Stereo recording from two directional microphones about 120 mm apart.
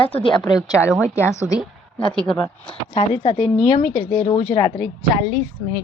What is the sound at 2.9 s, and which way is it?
A woman's voice, 55° left (ahead or behind).